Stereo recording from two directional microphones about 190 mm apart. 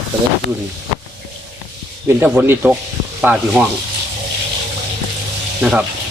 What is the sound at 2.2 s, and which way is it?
Speech, 10° right (ahead or behind).